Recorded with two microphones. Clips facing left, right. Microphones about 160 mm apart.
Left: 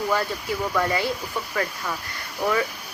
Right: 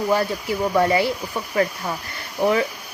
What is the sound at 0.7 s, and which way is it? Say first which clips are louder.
Speech: right 6 dB; 25° right (ahead or behind).